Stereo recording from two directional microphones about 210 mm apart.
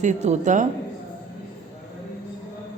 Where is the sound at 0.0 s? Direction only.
35° right (ahead or behind).